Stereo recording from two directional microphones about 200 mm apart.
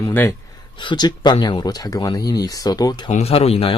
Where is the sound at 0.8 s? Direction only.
20° left (ahead or behind).